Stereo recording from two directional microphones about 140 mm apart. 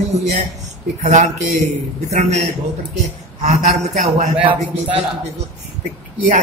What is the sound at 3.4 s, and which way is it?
Speech, 55° right (ahead or behind).